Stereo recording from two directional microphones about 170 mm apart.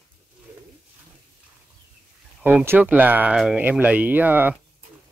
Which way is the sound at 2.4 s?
10° right (ahead or behind).